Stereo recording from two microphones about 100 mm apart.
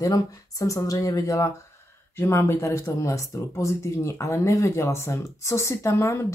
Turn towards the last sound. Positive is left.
turn(degrees=25)  # may be behind; listen again after turning